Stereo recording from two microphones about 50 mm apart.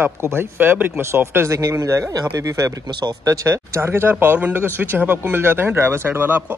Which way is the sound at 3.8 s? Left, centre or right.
Right.